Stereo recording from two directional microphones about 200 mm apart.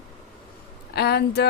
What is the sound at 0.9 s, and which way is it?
Speech, 55° left (ahead or behind).